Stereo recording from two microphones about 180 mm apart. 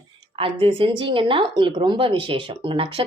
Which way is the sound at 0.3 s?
30° right (ahead or behind).